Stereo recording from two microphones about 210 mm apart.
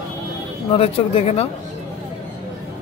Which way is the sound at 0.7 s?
25° left (ahead or behind).